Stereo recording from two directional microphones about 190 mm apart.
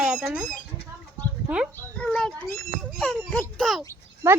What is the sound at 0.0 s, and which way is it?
Chicken, 5° right (ahead or behind).